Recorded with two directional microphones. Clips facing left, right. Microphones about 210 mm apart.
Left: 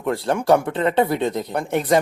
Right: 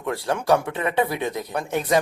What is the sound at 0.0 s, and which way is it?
Speech, 20° left (ahead or behind).